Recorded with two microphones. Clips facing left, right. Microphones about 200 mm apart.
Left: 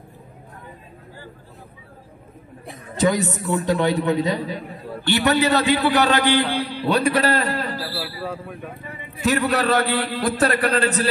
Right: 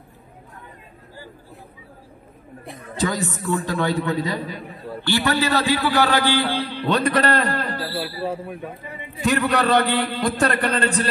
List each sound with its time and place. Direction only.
2.6 s a sound: centre (ahead or behind)
3.0 s a man's voice: 20° left (ahead or behind); by 7.8 s 5° left (ahead or behind)
8.0 s speech: 25° right (ahead or behind)
9.2 s a man's voice: centre (ahead or behind)